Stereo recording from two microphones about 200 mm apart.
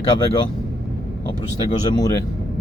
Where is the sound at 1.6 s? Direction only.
20° left (ahead or behind).